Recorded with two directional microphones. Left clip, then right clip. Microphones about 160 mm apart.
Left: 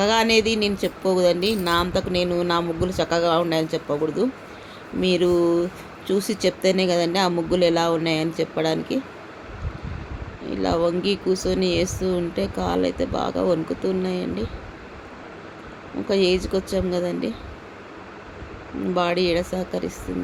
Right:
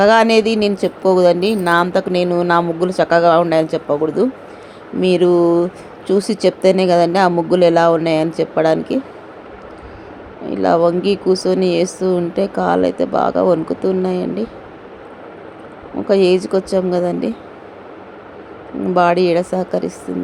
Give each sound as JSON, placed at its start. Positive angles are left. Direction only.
{"t": 0.0, "sound": "speech", "side_deg": -15}
{"t": 10.5, "sound": "speech", "side_deg": -15}
{"t": 16.0, "sound": "speech", "side_deg": -15}
{"t": 18.9, "sound": "speech", "side_deg": -15}